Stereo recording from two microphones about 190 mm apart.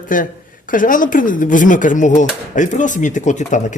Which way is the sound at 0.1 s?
45° left (ahead or behind).